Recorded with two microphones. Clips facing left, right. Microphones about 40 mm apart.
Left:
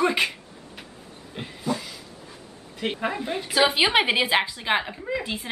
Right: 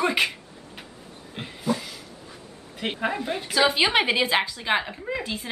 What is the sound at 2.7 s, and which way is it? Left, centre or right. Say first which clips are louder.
A woman's voice: even; centre.